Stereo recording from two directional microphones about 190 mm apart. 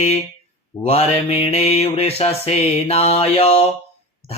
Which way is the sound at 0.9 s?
30° left (ahead or behind).